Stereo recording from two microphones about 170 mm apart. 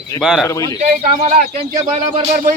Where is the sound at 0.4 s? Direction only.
20° left (ahead or behind).